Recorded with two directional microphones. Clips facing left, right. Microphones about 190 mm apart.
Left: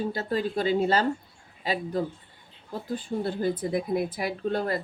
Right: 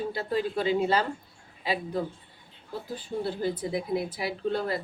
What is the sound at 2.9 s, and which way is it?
Speech, 50° left (ahead or behind).